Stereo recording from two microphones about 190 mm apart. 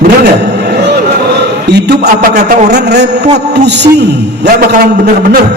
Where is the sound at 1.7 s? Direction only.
60° right (ahead or behind).